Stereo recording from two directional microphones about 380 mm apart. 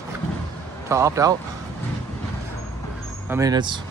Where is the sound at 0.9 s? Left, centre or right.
Centre.